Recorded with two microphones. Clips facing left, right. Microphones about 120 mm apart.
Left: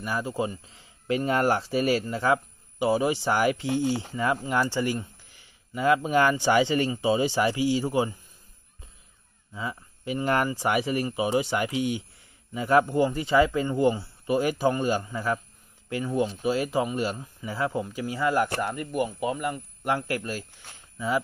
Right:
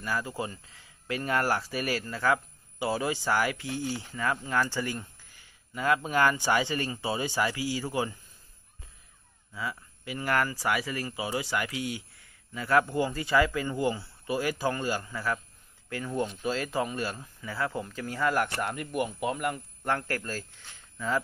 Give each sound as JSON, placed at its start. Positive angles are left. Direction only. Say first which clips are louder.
{"t": 0.0, "sound": "speech", "louder": "left 4 dB", "side_deg": 20}
{"t": 9.5, "sound": "speech", "louder": "left 2 dB", "side_deg": 25}
{"t": 18.6, "sound": "speech", "louder": "left 3 dB", "side_deg": 0}
{"t": 19.8, "sound": "speech", "louder": "left 3 dB", "side_deg": 15}